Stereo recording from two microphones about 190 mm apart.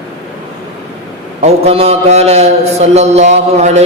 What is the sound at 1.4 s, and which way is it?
A man's voice, 35° right (ahead or behind).